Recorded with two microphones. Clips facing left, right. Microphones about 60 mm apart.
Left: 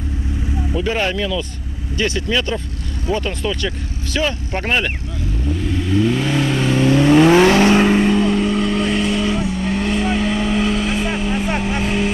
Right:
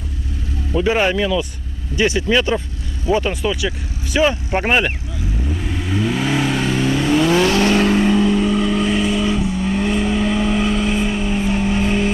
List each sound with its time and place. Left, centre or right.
0.7 s speech: centre
5.6 s vehicle: centre
7.2 s vehicle: left
7.8 s vehicle: centre